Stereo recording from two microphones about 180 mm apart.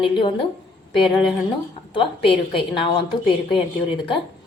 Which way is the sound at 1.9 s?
30° left (ahead or behind).